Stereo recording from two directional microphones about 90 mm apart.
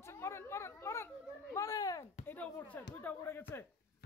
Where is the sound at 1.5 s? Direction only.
45° left (ahead or behind).